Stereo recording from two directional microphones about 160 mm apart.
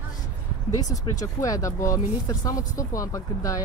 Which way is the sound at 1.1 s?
20° left (ahead or behind).